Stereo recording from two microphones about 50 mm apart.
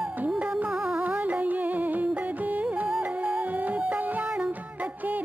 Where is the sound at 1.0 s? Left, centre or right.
Right.